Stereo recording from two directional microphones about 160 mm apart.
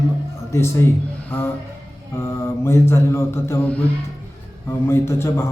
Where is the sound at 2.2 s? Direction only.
15° left (ahead or behind).